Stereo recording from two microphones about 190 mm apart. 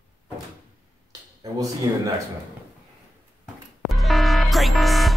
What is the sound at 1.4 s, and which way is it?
Speech, 20° right (ahead or behind).